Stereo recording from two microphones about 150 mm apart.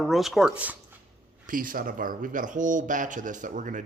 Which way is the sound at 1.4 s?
65° right (ahead or behind).